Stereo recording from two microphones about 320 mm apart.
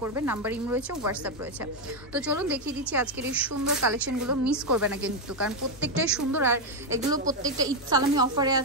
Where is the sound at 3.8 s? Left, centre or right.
Right.